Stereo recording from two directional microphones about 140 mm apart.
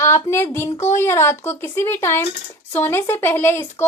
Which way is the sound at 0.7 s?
20° left (ahead or behind).